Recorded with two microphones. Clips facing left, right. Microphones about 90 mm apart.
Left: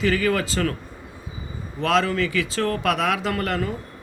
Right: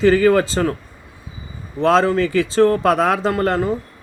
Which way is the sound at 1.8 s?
30° right (ahead or behind).